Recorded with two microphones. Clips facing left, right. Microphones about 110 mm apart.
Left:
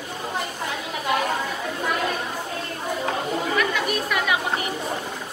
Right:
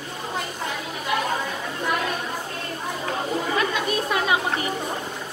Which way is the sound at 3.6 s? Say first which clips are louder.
Even; 25° right (ahead or behind).